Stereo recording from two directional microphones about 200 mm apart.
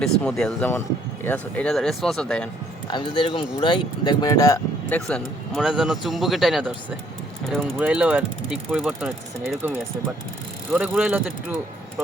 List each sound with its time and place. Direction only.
0.0 s speech: 5° left (ahead or behind)
2.8 s speech: 25° left (ahead or behind)
5.0 s speech: centre (ahead or behind)